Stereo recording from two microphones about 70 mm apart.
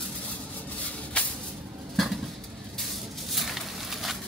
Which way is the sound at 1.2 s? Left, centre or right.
Centre.